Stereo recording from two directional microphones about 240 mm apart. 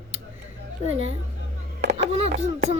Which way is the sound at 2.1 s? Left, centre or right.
Right.